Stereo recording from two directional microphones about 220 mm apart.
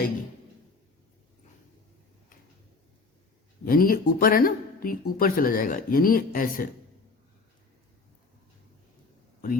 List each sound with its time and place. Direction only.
3.7 s speech: 40° left (ahead or behind)